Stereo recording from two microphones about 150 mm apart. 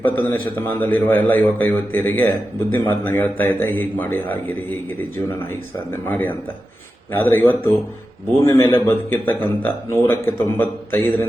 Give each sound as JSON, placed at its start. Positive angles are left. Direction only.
{"t": 0.0, "sound": "a man's voice", "side_deg": 10}
{"t": 6.1, "sound": "a man's voice", "side_deg": 10}